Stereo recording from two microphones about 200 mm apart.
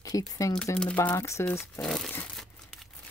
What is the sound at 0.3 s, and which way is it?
Speech, 20° left (ahead or behind).